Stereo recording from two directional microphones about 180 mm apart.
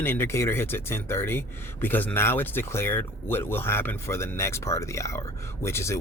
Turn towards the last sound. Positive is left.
turn(degrees=15)  # may be behind; listen again after turning